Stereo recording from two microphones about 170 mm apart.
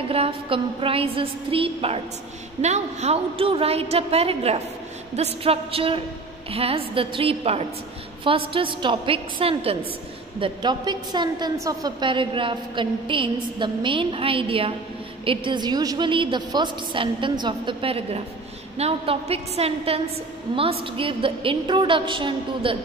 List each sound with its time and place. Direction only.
0.1 s a woman's voice: 35° right (ahead or behind)